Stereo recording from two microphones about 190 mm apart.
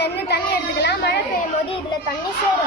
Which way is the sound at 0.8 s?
60° left (ahead or behind).